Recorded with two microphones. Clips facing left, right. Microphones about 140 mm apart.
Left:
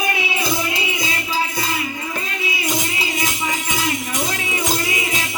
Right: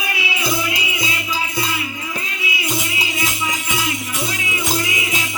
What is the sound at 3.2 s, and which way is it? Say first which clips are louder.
Music: even; 45° left (ahead or behind).